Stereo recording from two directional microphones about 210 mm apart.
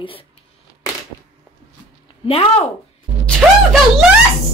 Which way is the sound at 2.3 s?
25° left (ahead or behind).